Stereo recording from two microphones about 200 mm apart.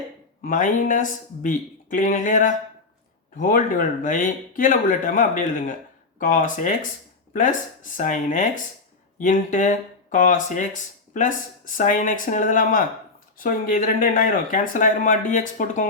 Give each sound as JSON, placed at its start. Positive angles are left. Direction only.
{"t": 0.4, "sound": "speech", "side_deg": 40}